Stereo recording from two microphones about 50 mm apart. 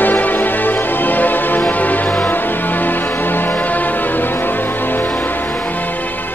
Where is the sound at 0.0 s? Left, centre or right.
Left.